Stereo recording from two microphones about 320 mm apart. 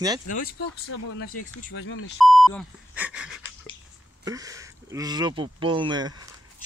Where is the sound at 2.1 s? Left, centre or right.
Centre.